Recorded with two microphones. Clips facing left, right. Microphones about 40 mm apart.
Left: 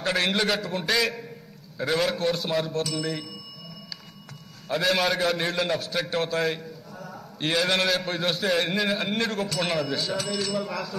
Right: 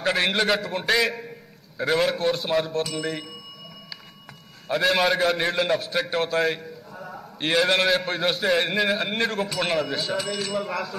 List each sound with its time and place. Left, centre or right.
0.0 s a man's voice: centre
4.6 s a man's voice: centre